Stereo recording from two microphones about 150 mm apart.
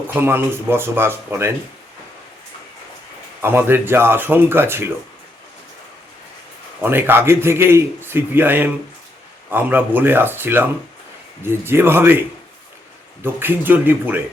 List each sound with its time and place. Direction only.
0.1 s a man's voice: 15° right (ahead or behind)
3.4 s a man's voice: 15° right (ahead or behind)
6.8 s a man's voice: 15° right (ahead or behind)
13.2 s a man's voice: 15° right (ahead or behind)